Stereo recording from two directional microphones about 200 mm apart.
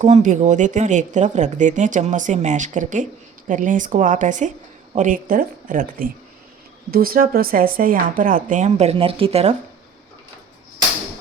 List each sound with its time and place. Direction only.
0.0 s speech: 35° right (ahead or behind)